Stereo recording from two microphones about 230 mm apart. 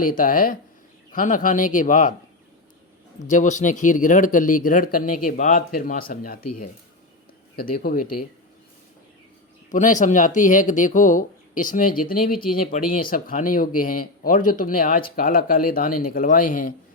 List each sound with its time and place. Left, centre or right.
0.1 s speech: left
3.2 s speech: left
7.5 s speech: left
9.6 s speech: left